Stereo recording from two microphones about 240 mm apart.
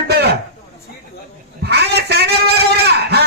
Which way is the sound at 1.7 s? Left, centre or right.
Right.